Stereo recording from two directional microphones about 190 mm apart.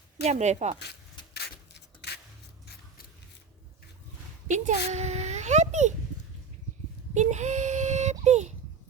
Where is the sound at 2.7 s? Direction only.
55° left (ahead or behind).